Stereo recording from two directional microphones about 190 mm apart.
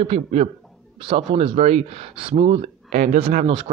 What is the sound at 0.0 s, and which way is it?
Speech, 35° right (ahead or behind).